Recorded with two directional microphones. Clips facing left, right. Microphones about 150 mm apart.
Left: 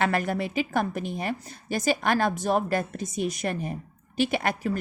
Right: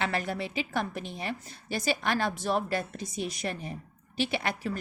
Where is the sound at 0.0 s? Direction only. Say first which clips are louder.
Left 5 dB; 50° left (ahead or behind).